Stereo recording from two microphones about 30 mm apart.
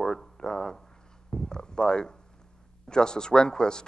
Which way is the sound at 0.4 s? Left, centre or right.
Left.